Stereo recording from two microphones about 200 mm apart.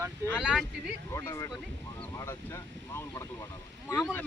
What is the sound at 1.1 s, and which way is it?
Speech, 15° left (ahead or behind).